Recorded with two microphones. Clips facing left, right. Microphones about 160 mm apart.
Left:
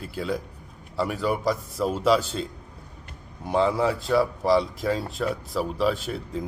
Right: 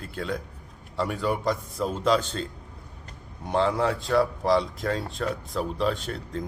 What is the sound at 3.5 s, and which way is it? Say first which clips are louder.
Speech: left 2 dB; 5° left (ahead or behind).